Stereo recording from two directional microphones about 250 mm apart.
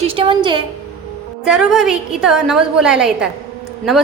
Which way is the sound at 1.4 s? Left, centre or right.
Centre.